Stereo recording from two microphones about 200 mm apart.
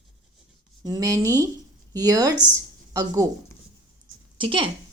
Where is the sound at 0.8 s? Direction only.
20° right (ahead or behind).